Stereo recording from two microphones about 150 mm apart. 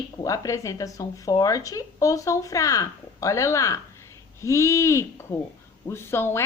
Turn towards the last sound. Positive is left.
turn(degrees=15)  # may be behind; listen again after turning